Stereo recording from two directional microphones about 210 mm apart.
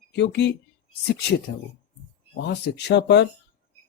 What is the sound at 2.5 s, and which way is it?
Speech, 55° left (ahead or behind).